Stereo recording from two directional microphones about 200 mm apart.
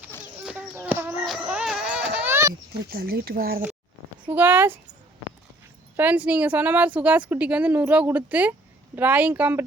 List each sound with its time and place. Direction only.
0.4 s a sound: 5° right (ahead or behind)
2.9 s speech: 50° right (ahead or behind)
4.3 s speech: 10° right (ahead or behind)
6.0 s speech: 5° right (ahead or behind)